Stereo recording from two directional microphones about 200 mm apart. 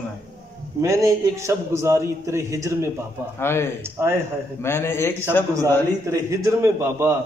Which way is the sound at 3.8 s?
10° right (ahead or behind).